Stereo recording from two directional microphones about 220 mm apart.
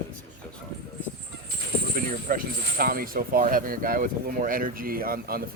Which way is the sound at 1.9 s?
40° right (ahead or behind).